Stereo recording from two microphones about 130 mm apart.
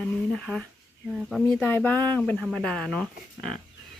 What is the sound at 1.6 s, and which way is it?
Speech, 15° left (ahead or behind).